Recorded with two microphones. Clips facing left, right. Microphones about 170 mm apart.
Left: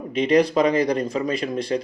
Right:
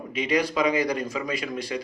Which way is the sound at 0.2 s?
35° left (ahead or behind).